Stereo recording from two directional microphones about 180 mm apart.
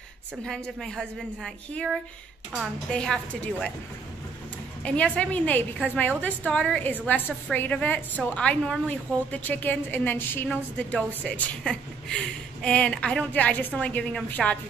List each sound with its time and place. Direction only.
0.5 s a woman's voice: centre (ahead or behind)
4.8 s a woman's voice: 5° left (ahead or behind)